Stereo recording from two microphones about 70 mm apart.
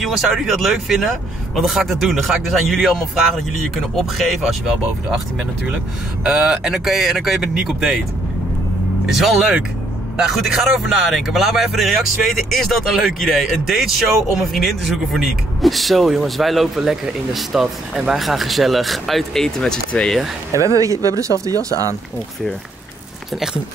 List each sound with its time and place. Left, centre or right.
0.0 s speech: centre
3.9 s speech: centre
6.2 s speech: centre
9.1 s speech: centre
20.5 s speech: right